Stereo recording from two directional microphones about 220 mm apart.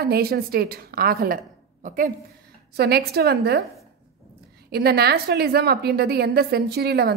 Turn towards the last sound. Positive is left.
turn(degrees=-45)  # may be behind; listen again after turning